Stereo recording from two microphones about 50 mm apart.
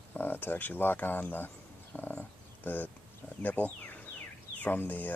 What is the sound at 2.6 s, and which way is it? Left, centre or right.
Speech, left.